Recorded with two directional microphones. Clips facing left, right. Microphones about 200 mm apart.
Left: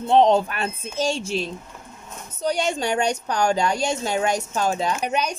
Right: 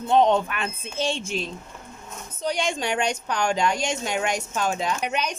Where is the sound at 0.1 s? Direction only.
35° left (ahead or behind).